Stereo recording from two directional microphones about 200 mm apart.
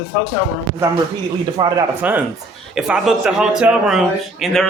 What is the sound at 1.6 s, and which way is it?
Speech, 20° right (ahead or behind).